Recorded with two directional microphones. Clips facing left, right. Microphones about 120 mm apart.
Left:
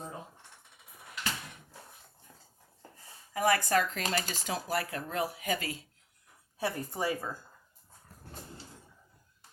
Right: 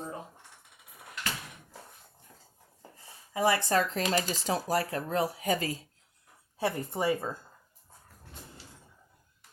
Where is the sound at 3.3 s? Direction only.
25° right (ahead or behind).